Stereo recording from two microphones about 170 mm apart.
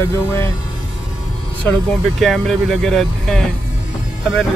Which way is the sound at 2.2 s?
Centre (ahead or behind).